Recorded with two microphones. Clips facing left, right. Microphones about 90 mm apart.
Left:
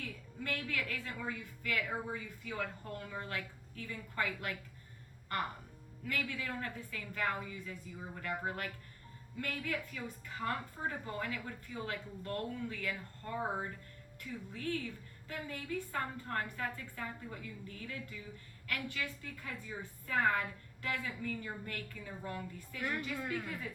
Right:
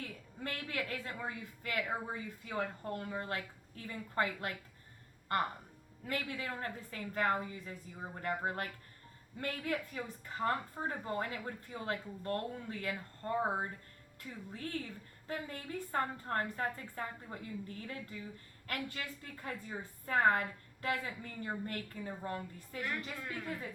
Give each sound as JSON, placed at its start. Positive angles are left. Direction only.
{"t": 0.0, "sound": "a woman's voice", "side_deg": -30}
{"t": 6.1, "sound": "a woman's voice", "side_deg": -35}